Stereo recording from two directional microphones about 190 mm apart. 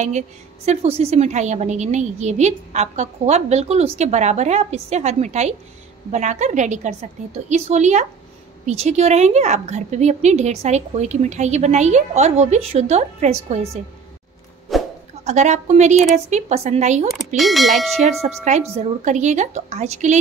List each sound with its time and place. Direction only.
0.7 s a woman's voice: 35° right (ahead or behind)
14.7 s a sound: centre (ahead or behind)
15.2 s a woman's voice: 40° right (ahead or behind)
17.4 s speech: centre (ahead or behind)
18.2 s a woman's voice: 40° right (ahead or behind)